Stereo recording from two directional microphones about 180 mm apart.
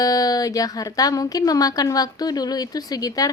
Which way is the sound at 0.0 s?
20° left (ahead or behind).